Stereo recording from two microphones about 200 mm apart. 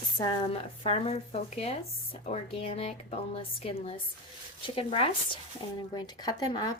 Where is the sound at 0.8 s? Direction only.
30° left (ahead or behind).